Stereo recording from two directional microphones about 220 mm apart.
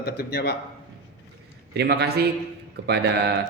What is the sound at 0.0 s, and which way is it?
Speech, 45° left (ahead or behind).